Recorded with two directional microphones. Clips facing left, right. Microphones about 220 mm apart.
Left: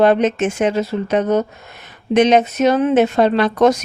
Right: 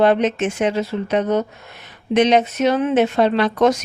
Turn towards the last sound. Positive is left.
turn(degrees=40)  # may be behind; listen again after turning